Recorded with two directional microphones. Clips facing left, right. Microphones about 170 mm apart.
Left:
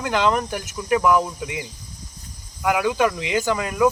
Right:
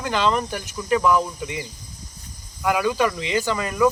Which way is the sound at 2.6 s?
15° left (ahead or behind).